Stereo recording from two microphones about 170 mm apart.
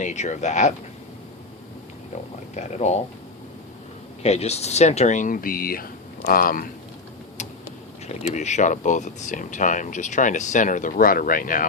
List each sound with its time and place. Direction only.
0.0 s speech: 45° left (ahead or behind)
2.6 s speech: 40° left (ahead or behind)
4.2 s speech: 40° left (ahead or behind); by 6.7 s 55° left (ahead or behind)
8.0 s speech: 40° left (ahead or behind)